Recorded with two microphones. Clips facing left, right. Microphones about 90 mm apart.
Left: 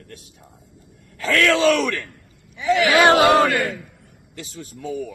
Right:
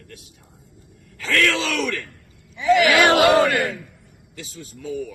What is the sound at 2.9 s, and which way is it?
Speech, 25° left (ahead or behind).